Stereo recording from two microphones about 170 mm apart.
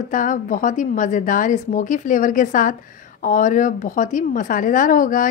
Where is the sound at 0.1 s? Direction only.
50° left (ahead or behind).